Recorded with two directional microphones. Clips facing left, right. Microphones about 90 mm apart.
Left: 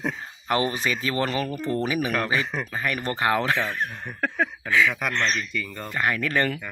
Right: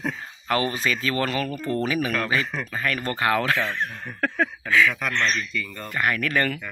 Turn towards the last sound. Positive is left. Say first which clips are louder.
# even
turn(degrees=20)  # may be behind; listen again after turning